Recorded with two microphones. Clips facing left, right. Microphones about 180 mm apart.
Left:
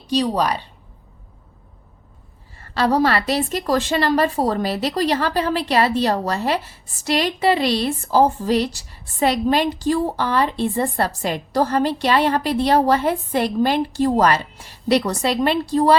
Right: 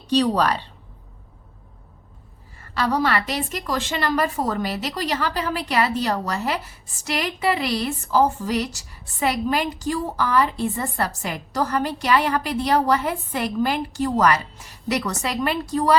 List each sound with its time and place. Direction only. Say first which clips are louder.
0.1 s a woman's voice: even; 10° left (ahead or behind)
2.6 s a woman's voice: left 5 dB; 30° left (ahead or behind)